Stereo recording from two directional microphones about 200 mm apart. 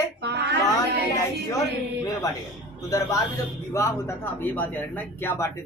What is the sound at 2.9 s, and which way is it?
Speech, 15° left (ahead or behind).